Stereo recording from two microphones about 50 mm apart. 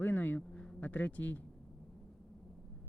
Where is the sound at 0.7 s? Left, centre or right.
Left.